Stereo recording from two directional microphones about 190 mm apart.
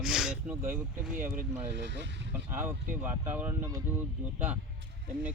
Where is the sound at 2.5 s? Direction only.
10° right (ahead or behind).